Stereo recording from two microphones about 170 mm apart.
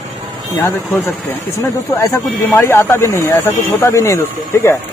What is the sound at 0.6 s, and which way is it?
Speech, 15° left (ahead or behind).